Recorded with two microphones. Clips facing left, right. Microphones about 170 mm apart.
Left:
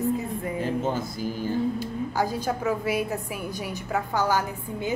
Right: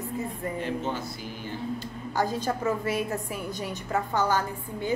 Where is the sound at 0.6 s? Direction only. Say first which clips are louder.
Left 5 dB; 40° left (ahead or behind).